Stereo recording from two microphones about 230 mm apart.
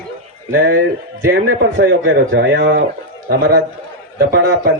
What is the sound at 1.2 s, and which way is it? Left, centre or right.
A man's voice, right.